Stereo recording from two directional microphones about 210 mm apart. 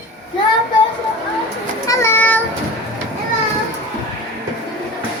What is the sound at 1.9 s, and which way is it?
Child singing, 15° left (ahead or behind).